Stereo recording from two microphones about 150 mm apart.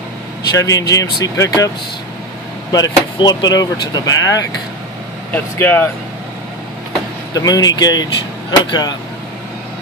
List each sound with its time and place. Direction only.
0.6 s speech: 20° left (ahead or behind)
2.7 s speech: 30° left (ahead or behind)
7.3 s speech: 25° left (ahead or behind)